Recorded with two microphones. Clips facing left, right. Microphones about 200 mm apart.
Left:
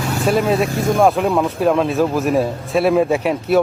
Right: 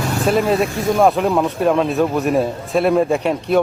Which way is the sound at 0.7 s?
45° left (ahead or behind).